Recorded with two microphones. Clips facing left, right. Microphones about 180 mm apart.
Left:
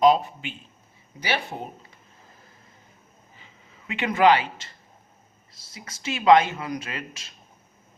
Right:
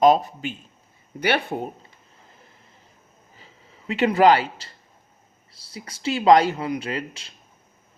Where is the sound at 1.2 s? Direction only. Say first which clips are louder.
Right 5 dB; 60° right (ahead or behind).